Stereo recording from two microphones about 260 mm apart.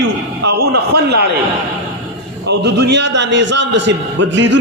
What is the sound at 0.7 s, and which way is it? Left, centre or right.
Speech, right.